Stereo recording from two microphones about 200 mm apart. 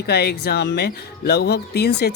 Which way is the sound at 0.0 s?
55° left (ahead or behind).